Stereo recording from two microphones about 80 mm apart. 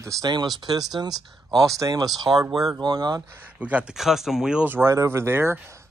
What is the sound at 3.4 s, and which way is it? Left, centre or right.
Speech, centre.